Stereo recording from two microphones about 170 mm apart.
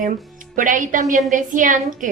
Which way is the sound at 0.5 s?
50° right (ahead or behind).